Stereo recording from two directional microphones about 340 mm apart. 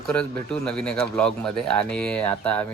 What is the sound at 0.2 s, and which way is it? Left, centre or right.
Speech, centre.